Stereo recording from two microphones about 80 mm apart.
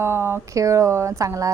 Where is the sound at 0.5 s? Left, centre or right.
Right.